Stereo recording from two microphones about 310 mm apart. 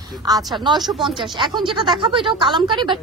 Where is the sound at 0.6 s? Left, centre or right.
Centre.